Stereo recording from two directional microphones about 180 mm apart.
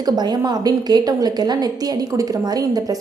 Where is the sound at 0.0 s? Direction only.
25° right (ahead or behind).